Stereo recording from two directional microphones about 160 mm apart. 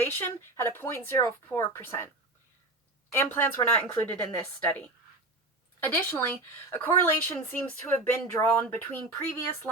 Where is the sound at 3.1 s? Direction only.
15° left (ahead or behind).